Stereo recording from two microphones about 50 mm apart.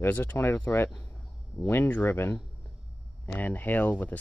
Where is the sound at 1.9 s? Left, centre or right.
Left.